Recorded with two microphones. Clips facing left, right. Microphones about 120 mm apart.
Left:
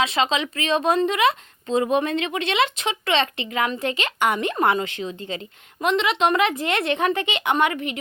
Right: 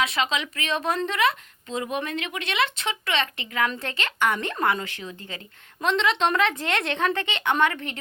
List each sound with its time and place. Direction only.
0.0 s speech: 25° left (ahead or behind)
1.6 s speech: 35° left (ahead or behind)
5.8 s a woman's voice: 10° left (ahead or behind)